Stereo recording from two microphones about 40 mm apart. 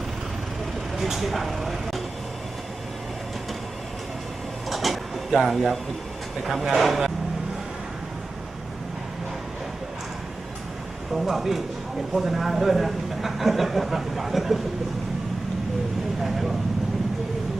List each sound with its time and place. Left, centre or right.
0.9 s vehicle: centre
4.7 s drawer open or close: centre
6.4 s speech: centre
11.1 s speech: centre
16.2 s vehicle: centre